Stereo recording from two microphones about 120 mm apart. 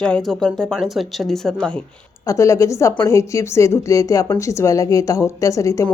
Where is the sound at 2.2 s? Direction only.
25° left (ahead or behind).